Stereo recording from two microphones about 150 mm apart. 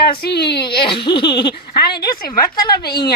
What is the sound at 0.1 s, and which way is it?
Speech, 90° left.